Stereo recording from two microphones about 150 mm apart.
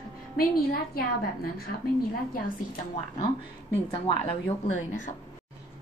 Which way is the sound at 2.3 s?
65° left (ahead or behind).